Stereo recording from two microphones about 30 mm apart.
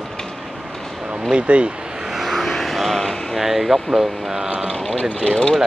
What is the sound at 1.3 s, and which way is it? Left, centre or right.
Speech, right.